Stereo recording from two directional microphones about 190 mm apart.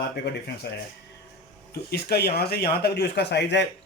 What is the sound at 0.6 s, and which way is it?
Speech, 60° left (ahead or behind).